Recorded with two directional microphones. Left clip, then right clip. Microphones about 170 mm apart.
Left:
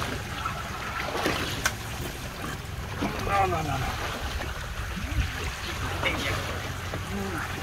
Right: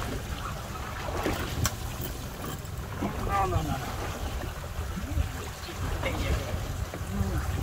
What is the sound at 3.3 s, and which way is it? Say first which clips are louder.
Boat: left 3 dB; 35° right (ahead or behind).